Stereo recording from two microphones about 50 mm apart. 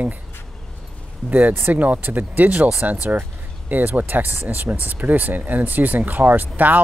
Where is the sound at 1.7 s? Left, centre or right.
Right.